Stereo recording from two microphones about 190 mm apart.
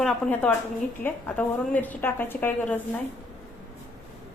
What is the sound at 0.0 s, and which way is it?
A woman's voice, 5° left (ahead or behind).